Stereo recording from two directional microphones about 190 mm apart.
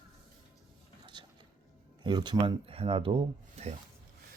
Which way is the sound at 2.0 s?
25° right (ahead or behind).